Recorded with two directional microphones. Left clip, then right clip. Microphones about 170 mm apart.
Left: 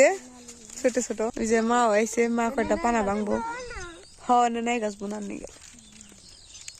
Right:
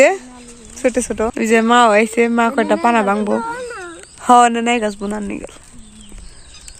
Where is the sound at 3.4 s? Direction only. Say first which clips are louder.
Right 9 dB; 65° right (ahead or behind).